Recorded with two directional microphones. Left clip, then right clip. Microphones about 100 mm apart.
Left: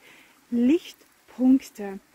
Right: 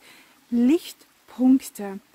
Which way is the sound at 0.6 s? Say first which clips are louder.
Right 1 dB; 40° right (ahead or behind).